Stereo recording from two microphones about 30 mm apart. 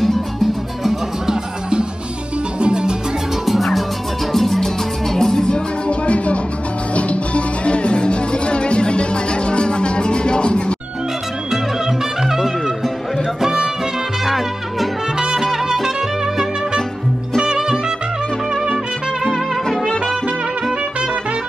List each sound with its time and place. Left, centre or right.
0.0 s music: centre
2.6 s music: right
3.4 s music: centre
5.1 s music: centre
5.9 s music: left
12.3 s music: centre
14.2 s music: centre
17.4 s music: right